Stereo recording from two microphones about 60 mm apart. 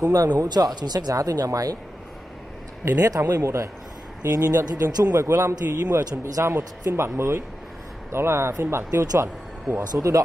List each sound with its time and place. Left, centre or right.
0.0 s speech: right
2.8 s a man's voice: right
5.1 s a man's voice: right
6.9 s a man's voice: right